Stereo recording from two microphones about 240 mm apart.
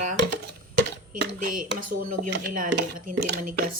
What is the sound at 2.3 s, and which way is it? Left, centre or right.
Speech, right.